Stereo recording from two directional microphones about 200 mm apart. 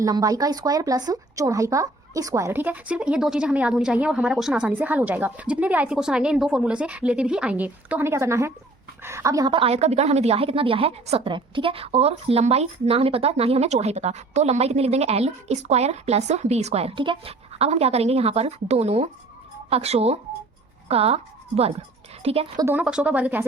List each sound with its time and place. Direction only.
0.0 s a woman's voice: 15° right (ahead or behind)
22.6 s speech: 5° right (ahead or behind)